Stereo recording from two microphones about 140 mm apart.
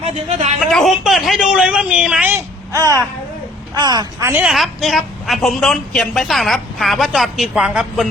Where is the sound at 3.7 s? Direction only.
30° right (ahead or behind).